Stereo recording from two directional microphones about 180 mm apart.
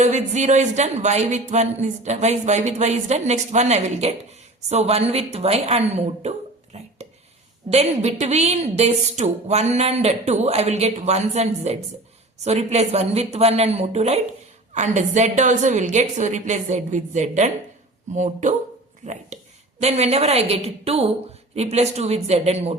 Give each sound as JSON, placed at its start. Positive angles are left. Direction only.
{"t": 0.0, "sound": "speech", "side_deg": -40}
{"t": 6.7, "sound": "a sound", "side_deg": -35}
{"t": 7.7, "sound": "speech", "side_deg": -35}